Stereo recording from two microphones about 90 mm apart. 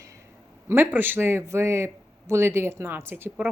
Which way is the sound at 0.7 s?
25° right (ahead or behind).